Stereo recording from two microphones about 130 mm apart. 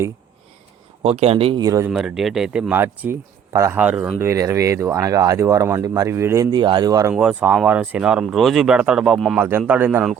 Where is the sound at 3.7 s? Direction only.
10° right (ahead or behind).